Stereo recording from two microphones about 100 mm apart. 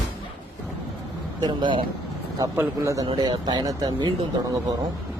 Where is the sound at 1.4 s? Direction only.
50° right (ahead or behind).